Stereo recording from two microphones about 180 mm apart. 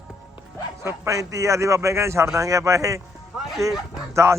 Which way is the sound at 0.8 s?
15° right (ahead or behind).